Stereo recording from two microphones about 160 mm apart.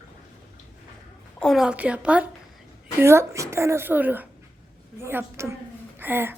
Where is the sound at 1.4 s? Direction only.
Centre (ahead or behind).